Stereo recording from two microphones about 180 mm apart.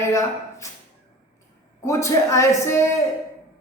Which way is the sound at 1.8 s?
15° left (ahead or behind).